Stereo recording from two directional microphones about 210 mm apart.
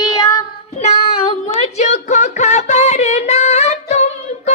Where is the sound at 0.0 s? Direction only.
20° left (ahead or behind).